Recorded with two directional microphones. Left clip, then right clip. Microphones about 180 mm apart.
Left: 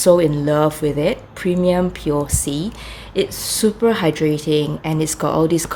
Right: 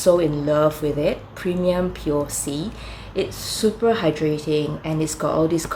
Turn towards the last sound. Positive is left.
turn(degrees=45)  # may be behind; listen again after turning